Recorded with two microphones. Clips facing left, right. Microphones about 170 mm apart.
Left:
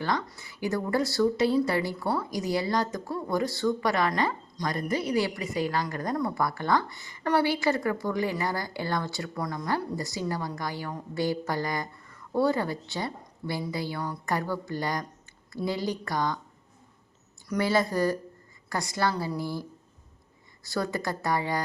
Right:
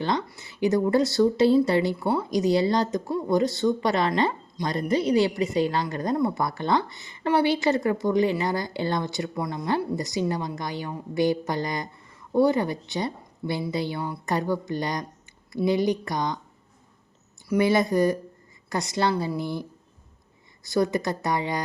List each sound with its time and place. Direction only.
0.3 s a woman's voice: 25° right (ahead or behind)
17.6 s a woman's voice: 20° right (ahead or behind)
20.7 s a woman's voice: 20° right (ahead or behind)